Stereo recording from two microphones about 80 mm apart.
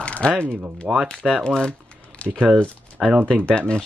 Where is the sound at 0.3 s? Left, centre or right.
Right.